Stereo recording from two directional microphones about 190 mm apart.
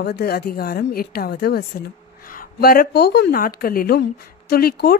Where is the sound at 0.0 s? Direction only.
55° left (ahead or behind).